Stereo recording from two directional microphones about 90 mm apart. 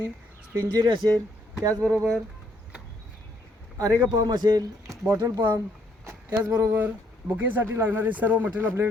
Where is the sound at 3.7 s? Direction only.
40° right (ahead or behind).